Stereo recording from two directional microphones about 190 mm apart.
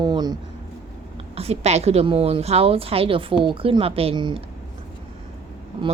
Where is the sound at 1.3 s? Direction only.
35° right (ahead or behind).